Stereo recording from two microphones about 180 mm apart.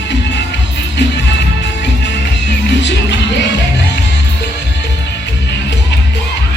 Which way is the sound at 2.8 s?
80° left.